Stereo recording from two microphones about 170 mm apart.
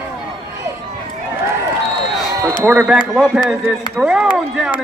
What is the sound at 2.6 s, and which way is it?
A man's voice, 10° right (ahead or behind).